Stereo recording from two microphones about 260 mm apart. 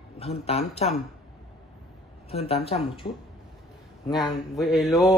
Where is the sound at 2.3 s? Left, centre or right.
Left.